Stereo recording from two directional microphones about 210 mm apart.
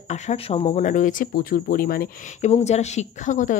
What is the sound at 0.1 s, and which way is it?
Speech, 35° left (ahead or behind).